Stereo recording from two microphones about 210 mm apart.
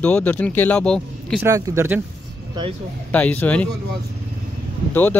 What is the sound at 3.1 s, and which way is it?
Speech, 10° left (ahead or behind).